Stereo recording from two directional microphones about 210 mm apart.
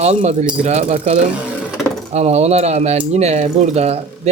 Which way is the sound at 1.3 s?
Centre (ahead or behind).